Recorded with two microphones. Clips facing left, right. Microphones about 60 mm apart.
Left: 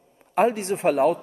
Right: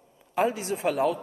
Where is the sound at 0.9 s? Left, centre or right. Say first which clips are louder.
Left 5 dB; left.